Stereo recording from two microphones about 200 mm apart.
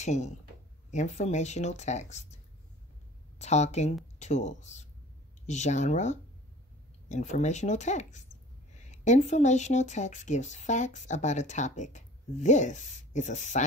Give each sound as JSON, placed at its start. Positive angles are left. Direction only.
{"t": 0.0, "sound": "speech", "side_deg": 35}
{"t": 3.3, "sound": "speech", "side_deg": 35}